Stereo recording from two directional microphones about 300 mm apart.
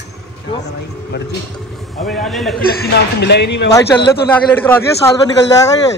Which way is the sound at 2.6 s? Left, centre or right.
Left.